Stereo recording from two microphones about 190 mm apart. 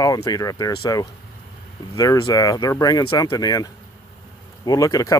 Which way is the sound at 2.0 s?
15° left (ahead or behind).